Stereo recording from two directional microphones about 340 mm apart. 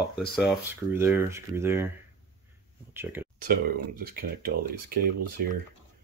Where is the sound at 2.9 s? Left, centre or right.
Centre.